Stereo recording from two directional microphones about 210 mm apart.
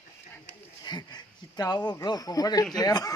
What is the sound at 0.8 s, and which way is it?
Speech, 20° left (ahead or behind).